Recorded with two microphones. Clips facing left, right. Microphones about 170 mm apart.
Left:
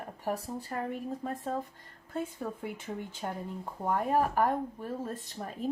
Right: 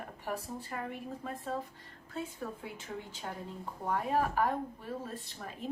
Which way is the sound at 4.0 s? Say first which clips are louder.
Left 3 dB; 45° left (ahead or behind).